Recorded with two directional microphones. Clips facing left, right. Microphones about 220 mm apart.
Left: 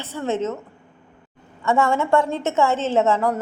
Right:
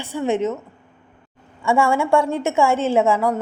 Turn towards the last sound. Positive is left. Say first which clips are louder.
# right 2 dB
turn(degrees=-10)  # may be behind; listen again after turning